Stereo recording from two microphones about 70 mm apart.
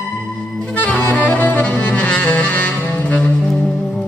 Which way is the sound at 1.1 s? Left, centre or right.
Left.